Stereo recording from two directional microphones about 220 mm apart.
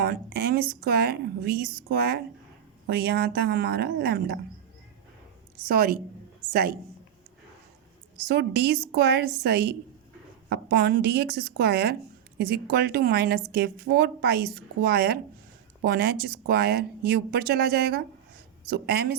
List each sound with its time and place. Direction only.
0.0 s speech: 45° right (ahead or behind)
5.6 s a woman's voice: 40° right (ahead or behind)
8.3 s speech: 45° right (ahead or behind)